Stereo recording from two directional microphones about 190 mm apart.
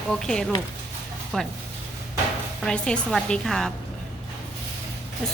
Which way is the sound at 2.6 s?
5° left (ahead or behind).